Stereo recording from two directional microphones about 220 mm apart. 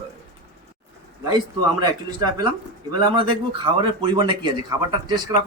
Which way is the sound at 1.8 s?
20° right (ahead or behind).